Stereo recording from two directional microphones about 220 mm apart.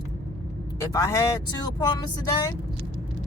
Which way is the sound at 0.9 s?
15° left (ahead or behind).